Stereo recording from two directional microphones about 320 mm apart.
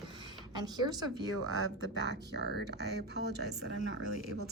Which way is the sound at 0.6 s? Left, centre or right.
Centre.